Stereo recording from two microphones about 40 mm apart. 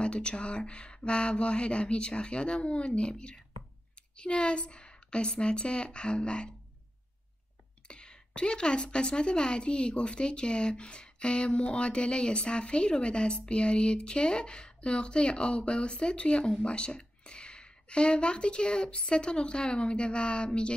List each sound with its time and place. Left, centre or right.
0.0 s speech: left
7.9 s a sound: left
8.4 s speech: left